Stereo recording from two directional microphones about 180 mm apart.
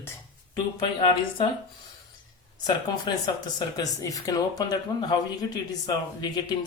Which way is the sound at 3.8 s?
20° left (ahead or behind).